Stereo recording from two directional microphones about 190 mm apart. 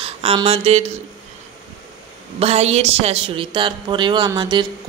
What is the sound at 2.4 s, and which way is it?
Speech, 35° right (ahead or behind).